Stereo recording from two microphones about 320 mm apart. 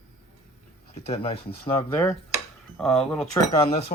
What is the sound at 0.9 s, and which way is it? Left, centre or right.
Speech, centre.